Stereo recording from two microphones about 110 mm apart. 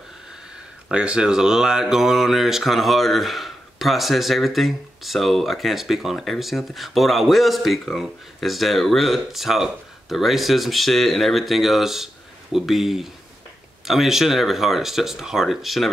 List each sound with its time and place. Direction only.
0.8 s speech: 10° right (ahead or behind)